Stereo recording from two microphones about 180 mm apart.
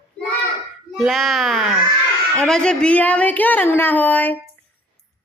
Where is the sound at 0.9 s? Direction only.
Centre (ahead or behind).